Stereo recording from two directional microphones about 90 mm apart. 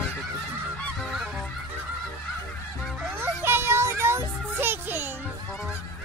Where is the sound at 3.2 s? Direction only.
25° right (ahead or behind).